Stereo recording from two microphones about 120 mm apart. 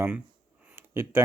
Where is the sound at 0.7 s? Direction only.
20° right (ahead or behind).